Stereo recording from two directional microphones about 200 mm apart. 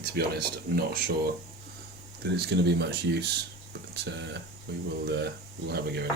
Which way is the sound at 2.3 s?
55° right (ahead or behind).